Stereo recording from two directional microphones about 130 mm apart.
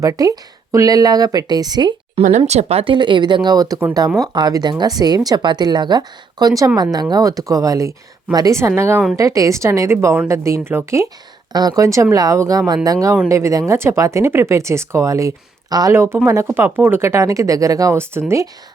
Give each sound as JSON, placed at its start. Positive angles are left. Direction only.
{"t": 0.0, "sound": "speech", "side_deg": -25}
{"t": 2.2, "sound": "speech", "side_deg": -50}